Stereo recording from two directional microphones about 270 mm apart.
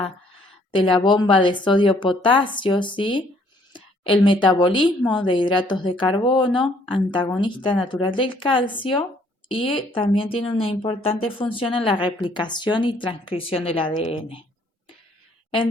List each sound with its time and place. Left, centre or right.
0.7 s a woman's voice: centre